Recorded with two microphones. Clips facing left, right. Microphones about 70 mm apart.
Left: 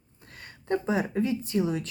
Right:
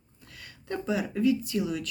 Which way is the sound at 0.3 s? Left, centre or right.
Left.